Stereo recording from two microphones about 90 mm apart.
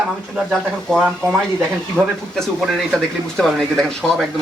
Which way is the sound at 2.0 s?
15° right (ahead or behind).